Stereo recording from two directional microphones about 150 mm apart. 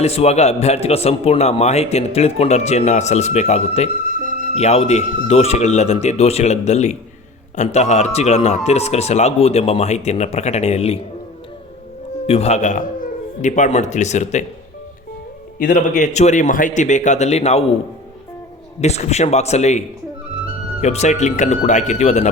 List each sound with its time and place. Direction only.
0.0 s a man's voice: 45° left (ahead or behind)
4.2 s music: 70° right (ahead or behind)
4.5 s a man's voice: 45° left (ahead or behind)
12.2 s a man's voice: 45° left (ahead or behind)
15.5 s a man's voice: 60° left (ahead or behind); by 17.7 s 45° left (ahead or behind)
18.8 s a man's voice: 45° left (ahead or behind)
20.8 s a man's voice: 50° left (ahead or behind)